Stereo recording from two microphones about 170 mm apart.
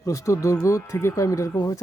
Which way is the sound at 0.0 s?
20° left (ahead or behind).